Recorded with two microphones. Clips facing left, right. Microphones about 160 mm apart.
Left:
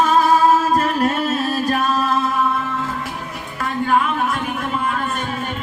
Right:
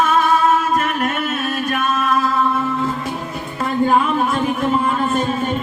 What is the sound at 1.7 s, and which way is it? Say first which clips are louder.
Music: right 1 dB; 30° left (ahead or behind).